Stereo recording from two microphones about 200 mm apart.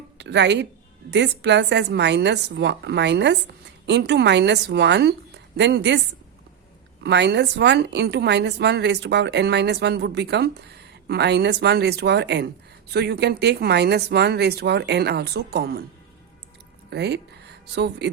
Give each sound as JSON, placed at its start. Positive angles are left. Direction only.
{"t": 0.2, "sound": "a woman's voice", "side_deg": -60}
{"t": 7.0, "sound": "a woman's voice", "side_deg": -55}
{"t": 16.9, "sound": "a woman's voice", "side_deg": -55}